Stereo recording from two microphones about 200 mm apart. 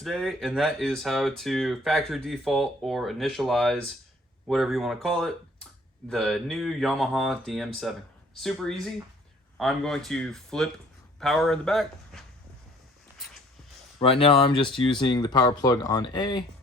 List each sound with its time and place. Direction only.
0.0 s speech: centre (ahead or behind)
14.0 s speech: 30° left (ahead or behind)